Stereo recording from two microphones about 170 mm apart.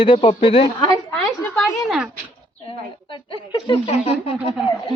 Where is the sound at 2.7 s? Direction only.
30° left (ahead or behind).